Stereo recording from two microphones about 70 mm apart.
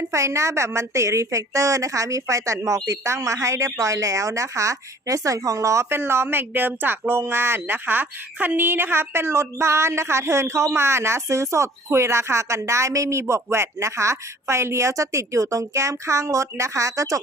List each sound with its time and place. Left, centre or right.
0.1 s speech: right